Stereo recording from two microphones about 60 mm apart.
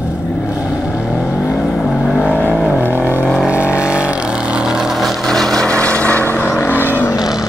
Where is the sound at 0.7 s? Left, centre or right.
Centre.